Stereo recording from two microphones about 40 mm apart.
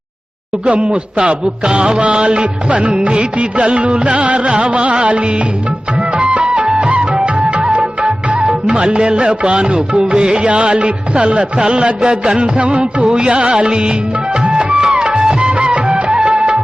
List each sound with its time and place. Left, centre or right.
0.6 s music: right
14.8 s music: centre
15.1 s music of bollywood: right